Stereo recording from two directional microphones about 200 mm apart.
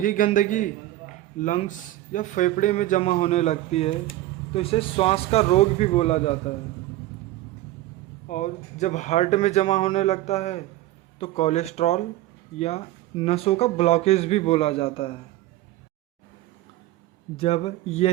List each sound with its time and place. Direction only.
0.0 s a man's voice: 40° left (ahead or behind)
8.3 s speech: 35° left (ahead or behind)
17.3 s speech: 30° left (ahead or behind)